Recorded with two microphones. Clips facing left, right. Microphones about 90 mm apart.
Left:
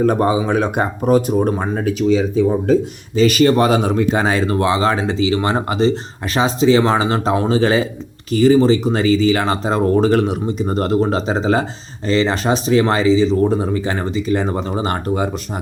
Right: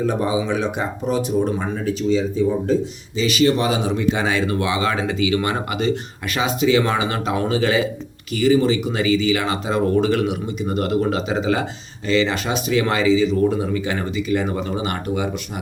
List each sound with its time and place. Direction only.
0.0 s speech: 55° left (ahead or behind)
1.8 s speech: 65° left (ahead or behind)
3.2 s speech: 50° left (ahead or behind)